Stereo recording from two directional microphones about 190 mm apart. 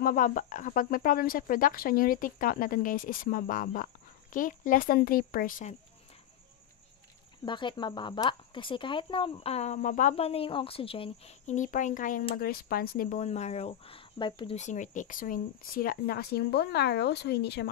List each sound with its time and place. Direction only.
0.0 s speech: 45° left (ahead or behind)
7.4 s speech: 25° left (ahead or behind)
14.6 s speech: 40° left (ahead or behind); by 17.6 s 60° left (ahead or behind)